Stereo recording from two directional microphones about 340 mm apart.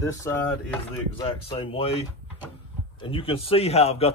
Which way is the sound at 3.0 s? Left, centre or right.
Centre.